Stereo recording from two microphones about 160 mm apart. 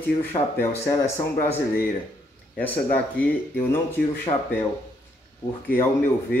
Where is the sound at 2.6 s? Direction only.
10° left (ahead or behind).